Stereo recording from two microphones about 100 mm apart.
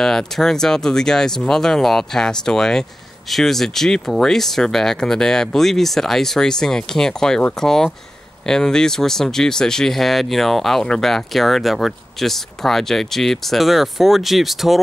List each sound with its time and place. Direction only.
0.0 s speech: 5° left (ahead or behind)